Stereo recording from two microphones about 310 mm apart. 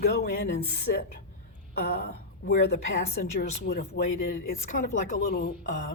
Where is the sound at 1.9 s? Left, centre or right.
Left.